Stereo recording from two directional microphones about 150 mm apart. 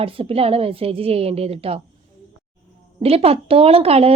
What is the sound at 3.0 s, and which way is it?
A woman's voice, 40° right (ahead or behind).